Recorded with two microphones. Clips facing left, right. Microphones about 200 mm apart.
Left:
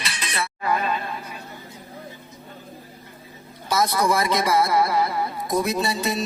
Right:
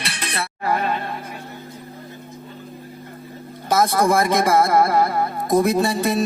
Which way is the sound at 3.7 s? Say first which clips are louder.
Right 4 dB; 50° right (ahead or behind).